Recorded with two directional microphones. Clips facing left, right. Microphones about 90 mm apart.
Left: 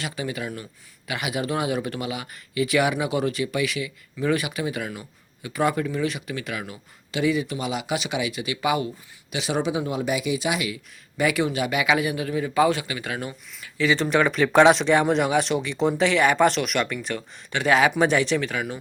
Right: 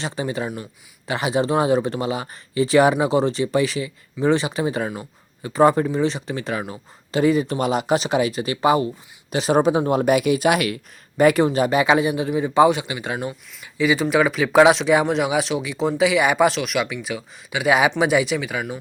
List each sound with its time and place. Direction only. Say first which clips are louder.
0.0 s a man's voice: right 4 dB; 30° right (ahead or behind); by 10.8 s 60° right (ahead or behind)
11.2 s a man's voice: right 7 dB; 40° right (ahead or behind); by 13.3 s 20° right (ahead or behind)
13.7 s speech: right 3 dB; 10° right (ahead or behind)